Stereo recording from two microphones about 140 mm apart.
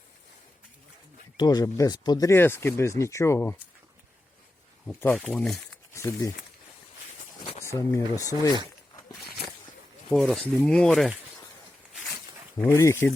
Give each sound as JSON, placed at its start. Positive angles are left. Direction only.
{"t": 1.4, "sound": "speech", "side_deg": 25}
{"t": 2.3, "sound": "speech", "side_deg": 15}
{"t": 4.9, "sound": "speech", "side_deg": 15}
{"t": 5.1, "sound": "speech", "side_deg": 0}
{"t": 5.9, "sound": "speech", "side_deg": 20}
{"t": 7.6, "sound": "speech", "side_deg": 20}
{"t": 10.1, "sound": "speech", "side_deg": 5}
{"t": 12.5, "sound": "speech", "side_deg": 15}